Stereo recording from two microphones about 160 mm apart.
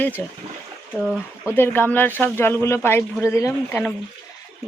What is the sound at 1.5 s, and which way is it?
Speech, 15° left (ahead or behind).